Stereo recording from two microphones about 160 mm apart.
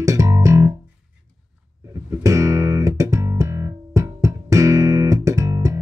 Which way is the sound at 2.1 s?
20° right (ahead or behind).